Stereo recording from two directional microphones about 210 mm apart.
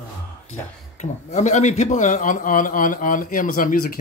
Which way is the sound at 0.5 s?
35° left (ahead or behind).